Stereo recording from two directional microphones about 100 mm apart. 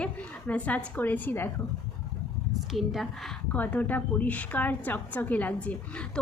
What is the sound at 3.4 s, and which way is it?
A woman's voice, 15° left (ahead or behind).